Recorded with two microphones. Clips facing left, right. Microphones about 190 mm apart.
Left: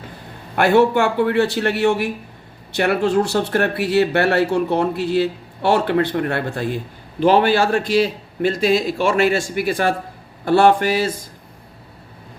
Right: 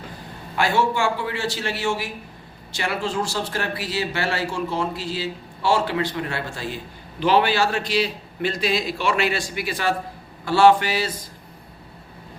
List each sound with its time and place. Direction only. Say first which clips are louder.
0.5 s a man's voice: left 7 dB; 60° left (ahead or behind)